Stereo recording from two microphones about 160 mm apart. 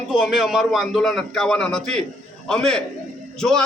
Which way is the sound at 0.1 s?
5° right (ahead or behind).